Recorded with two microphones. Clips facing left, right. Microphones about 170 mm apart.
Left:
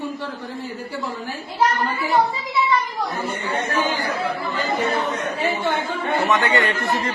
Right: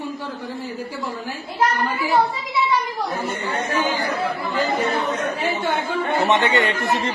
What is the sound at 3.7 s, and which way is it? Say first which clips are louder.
Speech: right 1 dB; 15° right (ahead or behind).